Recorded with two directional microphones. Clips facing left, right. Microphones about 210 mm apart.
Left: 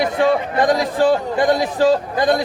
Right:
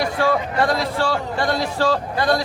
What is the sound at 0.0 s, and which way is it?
A man's voice, 20° left (ahead or behind).